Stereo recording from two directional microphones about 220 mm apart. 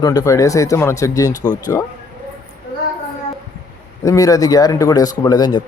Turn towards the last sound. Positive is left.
turn(degrees=20)  # may be behind; listen again after turning